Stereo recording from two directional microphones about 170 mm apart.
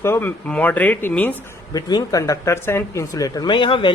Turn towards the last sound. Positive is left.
turn(degrees=30)  # may be behind; listen again after turning